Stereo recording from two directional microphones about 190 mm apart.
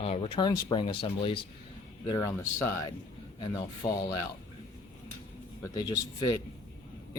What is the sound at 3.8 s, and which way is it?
Speech, 15° left (ahead or behind).